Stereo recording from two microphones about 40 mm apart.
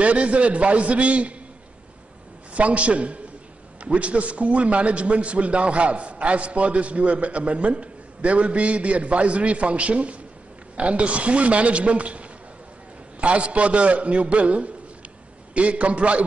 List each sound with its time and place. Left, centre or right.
0.0 s a man's voice: right
2.5 s a man's voice: right